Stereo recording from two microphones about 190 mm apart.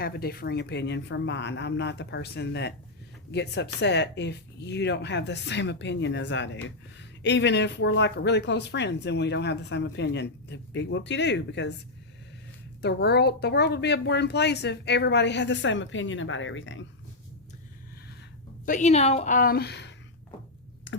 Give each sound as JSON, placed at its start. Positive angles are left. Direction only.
{"t": 0.0, "sound": "speech", "side_deg": 55}
{"t": 12.8, "sound": "speech", "side_deg": 60}
{"t": 18.6, "sound": "a woman's voice", "side_deg": 40}